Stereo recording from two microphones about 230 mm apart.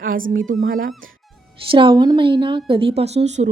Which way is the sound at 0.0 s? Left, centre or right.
Right.